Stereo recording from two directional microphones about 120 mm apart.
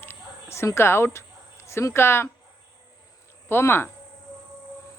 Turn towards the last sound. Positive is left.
turn(degrees=20)  # may be behind; listen again after turning